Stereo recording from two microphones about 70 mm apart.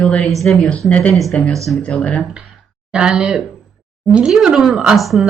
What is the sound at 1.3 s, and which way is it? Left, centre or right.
Speech, centre.